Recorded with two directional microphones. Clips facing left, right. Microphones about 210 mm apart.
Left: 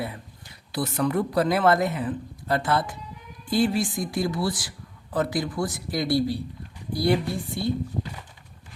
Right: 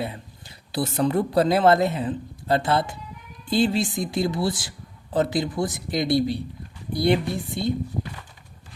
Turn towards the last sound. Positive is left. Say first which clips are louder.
# right 1 dB
turn(degrees=-20)  # may be behind; listen again after turning